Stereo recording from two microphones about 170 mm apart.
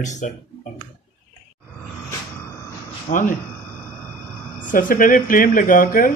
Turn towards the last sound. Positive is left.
turn(degrees=55)  # may be behind; listen again after turning